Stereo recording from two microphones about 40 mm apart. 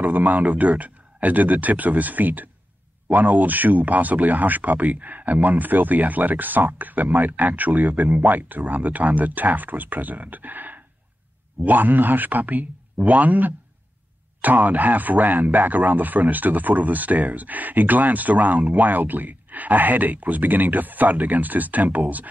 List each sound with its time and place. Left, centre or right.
0.0 s speech: right